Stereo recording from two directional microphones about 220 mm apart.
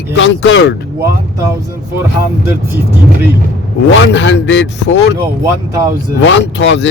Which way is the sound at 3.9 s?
55° left (ahead or behind).